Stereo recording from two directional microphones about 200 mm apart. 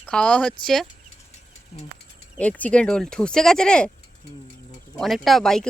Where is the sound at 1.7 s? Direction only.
30° left (ahead or behind).